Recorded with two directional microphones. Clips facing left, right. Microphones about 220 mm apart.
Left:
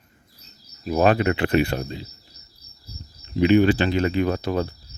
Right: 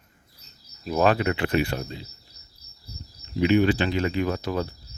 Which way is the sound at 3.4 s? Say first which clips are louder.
Left 3 dB; 30° left (ahead or behind).